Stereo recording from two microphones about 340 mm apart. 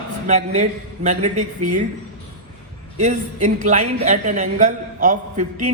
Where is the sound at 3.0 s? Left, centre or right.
Right.